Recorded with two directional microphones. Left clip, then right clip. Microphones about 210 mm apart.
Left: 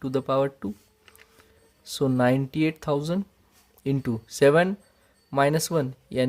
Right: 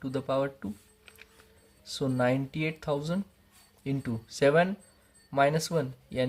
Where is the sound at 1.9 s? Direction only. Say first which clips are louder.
Left 5 dB; 50° left (ahead or behind).